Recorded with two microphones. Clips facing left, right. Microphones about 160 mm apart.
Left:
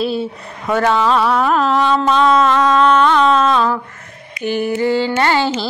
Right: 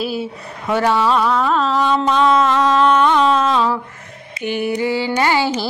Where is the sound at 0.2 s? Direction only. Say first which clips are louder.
Left 2 dB; 10° right (ahead or behind).